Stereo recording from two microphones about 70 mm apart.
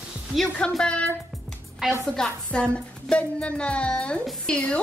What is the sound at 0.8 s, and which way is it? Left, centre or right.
Speech, centre.